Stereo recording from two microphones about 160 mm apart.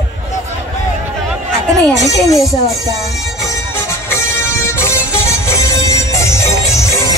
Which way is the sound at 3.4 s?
20° left (ahead or behind).